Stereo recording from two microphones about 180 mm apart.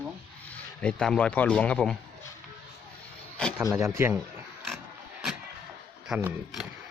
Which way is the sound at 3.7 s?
15° right (ahead or behind).